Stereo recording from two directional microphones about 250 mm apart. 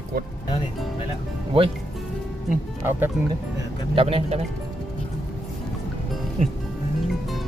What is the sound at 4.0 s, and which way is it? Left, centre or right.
Speech, right.